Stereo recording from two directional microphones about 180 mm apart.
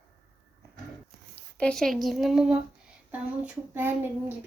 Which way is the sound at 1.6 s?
5° left (ahead or behind).